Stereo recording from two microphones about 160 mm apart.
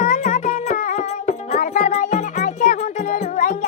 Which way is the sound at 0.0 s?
50° left (ahead or behind).